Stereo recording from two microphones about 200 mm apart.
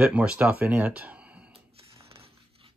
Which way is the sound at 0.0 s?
5° right (ahead or behind).